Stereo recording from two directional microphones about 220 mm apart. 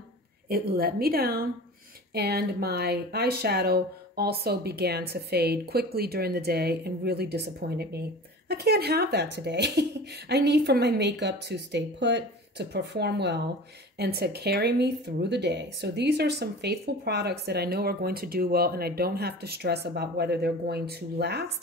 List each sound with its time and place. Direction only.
0.5 s speech: 45° right (ahead or behind)